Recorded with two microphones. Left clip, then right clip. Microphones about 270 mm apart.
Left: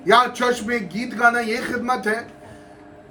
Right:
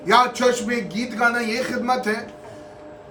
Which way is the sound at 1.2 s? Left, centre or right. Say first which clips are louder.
Left 3 dB; right.